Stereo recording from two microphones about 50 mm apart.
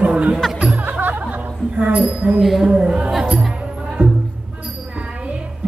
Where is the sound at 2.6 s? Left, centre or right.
Centre.